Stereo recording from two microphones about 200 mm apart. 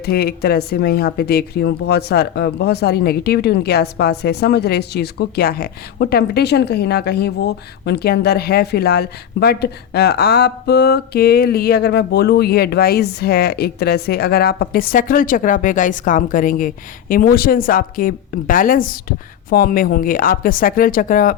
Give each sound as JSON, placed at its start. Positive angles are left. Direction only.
{"t": 0.0, "sound": "speech", "side_deg": 50}